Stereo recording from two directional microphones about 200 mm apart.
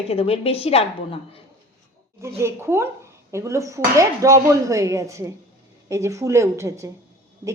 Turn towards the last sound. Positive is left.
turn(degrees=-15)  # may be behind; listen again after turning